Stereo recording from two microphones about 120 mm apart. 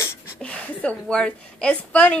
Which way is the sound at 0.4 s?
10° left (ahead or behind).